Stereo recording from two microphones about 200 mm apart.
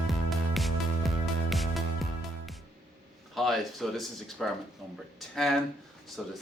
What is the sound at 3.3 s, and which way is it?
Speech, centre (ahead or behind).